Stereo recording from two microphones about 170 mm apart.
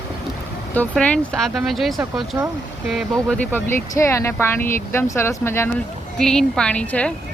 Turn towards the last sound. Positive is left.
turn(degrees=10)  # may be behind; listen again after turning